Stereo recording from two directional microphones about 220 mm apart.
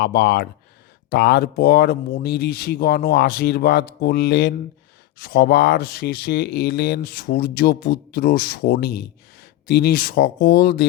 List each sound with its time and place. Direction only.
0.0 s speech: 45° left (ahead or behind)